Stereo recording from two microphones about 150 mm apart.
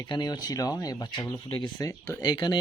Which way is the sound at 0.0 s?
25° left (ahead or behind).